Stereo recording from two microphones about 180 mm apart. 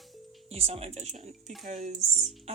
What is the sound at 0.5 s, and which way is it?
Speech, 35° right (ahead or behind).